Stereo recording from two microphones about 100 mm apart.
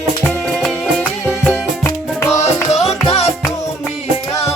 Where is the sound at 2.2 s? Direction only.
25° left (ahead or behind).